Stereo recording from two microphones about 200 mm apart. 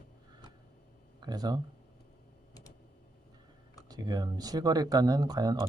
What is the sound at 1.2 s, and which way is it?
Speech, 20° right (ahead or behind).